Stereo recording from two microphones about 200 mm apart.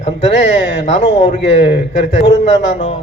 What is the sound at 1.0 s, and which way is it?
A man's voice, 65° left (ahead or behind).